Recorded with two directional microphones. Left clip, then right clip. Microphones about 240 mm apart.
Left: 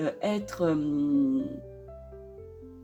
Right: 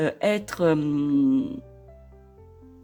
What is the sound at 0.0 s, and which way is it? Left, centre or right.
Speech, right.